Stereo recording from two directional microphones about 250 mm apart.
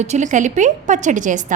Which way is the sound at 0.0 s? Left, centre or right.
Right.